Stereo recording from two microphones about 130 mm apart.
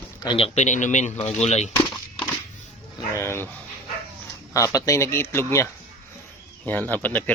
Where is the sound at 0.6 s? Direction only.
70° left (ahead or behind).